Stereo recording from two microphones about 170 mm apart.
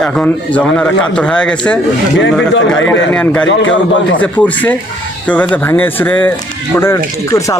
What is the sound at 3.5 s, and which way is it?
Speech, 90° left.